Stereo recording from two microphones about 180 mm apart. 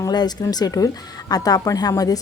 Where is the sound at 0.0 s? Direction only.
20° left (ahead or behind).